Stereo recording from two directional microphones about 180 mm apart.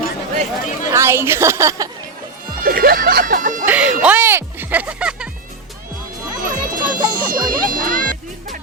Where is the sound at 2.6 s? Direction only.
55° right (ahead or behind).